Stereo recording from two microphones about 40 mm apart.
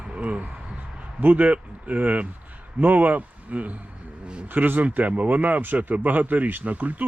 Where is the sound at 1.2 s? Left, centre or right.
Right.